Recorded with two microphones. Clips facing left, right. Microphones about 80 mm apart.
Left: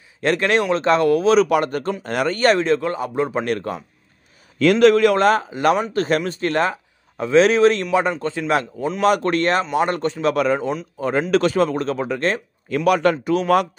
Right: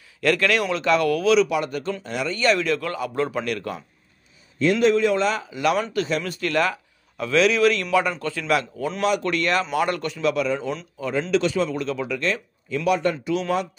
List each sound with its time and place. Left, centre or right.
0.2 s a man's voice: left
1.3 s a man's voice: left
2.6 s speech: left
3.4 s a man's voice: left
4.6 s a man's voice: left
6.2 s speech: left
9.0 s a man's voice: left
10.3 s a man's voice: left
12.6 s speech: left
13.2 s a man's voice: left